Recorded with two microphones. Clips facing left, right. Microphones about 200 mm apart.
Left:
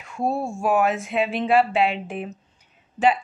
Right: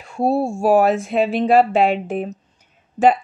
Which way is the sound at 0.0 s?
35° right (ahead or behind).